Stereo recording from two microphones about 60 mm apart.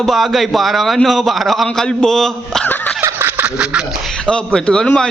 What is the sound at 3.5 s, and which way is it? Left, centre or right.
Speech, centre.